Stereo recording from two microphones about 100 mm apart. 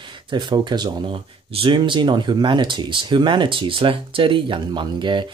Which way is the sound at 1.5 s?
60° right (ahead or behind).